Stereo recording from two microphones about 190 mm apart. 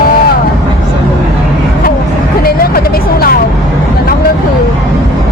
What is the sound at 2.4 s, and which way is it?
Vehicle, 50° left (ahead or behind).